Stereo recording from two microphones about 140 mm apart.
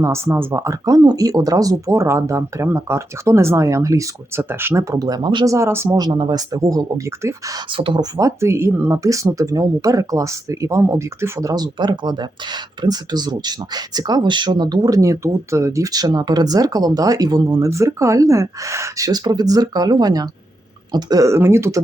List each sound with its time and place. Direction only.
0.0 s speech: 20° right (ahead or behind); by 5.5 s 35° right (ahead or behind)
5.5 s speech: 20° right (ahead or behind)
6.1 s speech: 35° right (ahead or behind)
7.7 s speech: 35° right (ahead or behind); by 21.8 s 20° right (ahead or behind)